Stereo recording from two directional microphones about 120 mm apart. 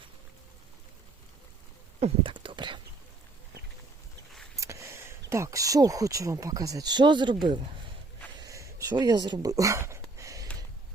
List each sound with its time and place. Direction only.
2.0 s speech: 60° right (ahead or behind)
2.3 s whispering: 45° right (ahead or behind)
4.6 s speech: 25° right (ahead or behind); by 7.3 s 40° right (ahead or behind)
8.4 s a sound: 25° right (ahead or behind)